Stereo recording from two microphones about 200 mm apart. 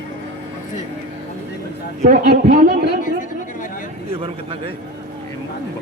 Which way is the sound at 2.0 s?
40° right (ahead or behind).